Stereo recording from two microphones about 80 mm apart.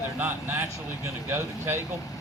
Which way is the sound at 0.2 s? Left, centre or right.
Right.